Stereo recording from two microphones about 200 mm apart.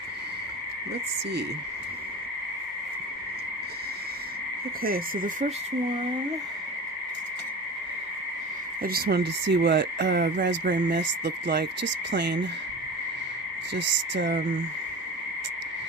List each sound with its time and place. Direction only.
4.8 s speech: 45° right (ahead or behind)
8.8 s speech: 50° right (ahead or behind)
10.8 s speech: 60° right (ahead or behind)
13.7 s speech: 60° right (ahead or behind)